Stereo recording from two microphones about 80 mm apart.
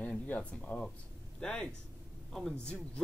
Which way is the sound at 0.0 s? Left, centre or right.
Centre.